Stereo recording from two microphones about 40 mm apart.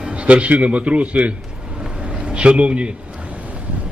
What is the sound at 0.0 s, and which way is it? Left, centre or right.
A man's voice, right.